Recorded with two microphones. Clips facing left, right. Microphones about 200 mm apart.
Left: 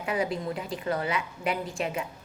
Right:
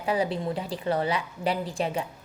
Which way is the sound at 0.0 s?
35° right (ahead or behind).